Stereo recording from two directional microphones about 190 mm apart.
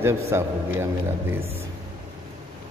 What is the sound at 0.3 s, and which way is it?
Speech, 15° right (ahead or behind).